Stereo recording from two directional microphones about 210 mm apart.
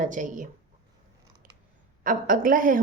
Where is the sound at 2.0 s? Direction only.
40° right (ahead or behind).